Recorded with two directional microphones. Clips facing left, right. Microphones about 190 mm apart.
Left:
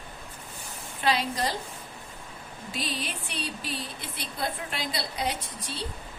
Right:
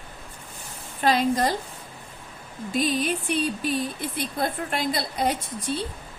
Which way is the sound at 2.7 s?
50° right (ahead or behind).